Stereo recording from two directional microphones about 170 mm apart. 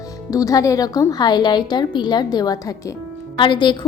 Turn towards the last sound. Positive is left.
turn(degrees=25)  # may be behind; listen again after turning